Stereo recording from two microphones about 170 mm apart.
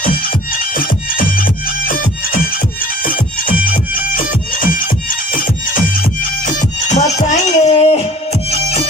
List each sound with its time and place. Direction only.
0.0 s music: 55° left (ahead or behind); by 8.8 s 35° left (ahead or behind)